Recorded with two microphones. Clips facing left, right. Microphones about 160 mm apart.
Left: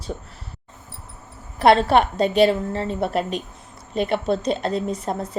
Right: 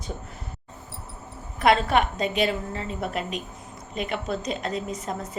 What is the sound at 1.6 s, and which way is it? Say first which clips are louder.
A woman's voice: left 5 dB; 35° left (ahead or behind).